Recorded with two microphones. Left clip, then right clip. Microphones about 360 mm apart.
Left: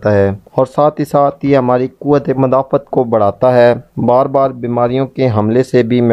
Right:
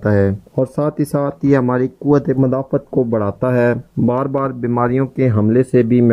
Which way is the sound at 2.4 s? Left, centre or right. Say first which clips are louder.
Left 6 dB; centre.